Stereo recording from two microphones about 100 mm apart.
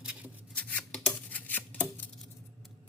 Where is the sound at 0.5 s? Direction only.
15° left (ahead or behind).